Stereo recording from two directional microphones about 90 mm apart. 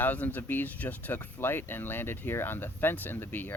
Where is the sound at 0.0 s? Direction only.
20° left (ahead or behind).